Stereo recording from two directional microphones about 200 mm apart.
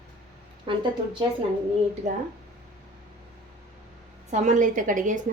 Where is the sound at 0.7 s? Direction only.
25° right (ahead or behind).